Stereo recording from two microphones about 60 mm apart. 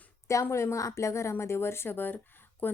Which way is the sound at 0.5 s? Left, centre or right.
Left.